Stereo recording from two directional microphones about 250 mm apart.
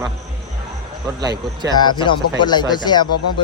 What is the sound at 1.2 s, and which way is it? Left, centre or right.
Speech, centre.